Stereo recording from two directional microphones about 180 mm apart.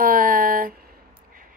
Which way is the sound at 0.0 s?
50° right (ahead or behind).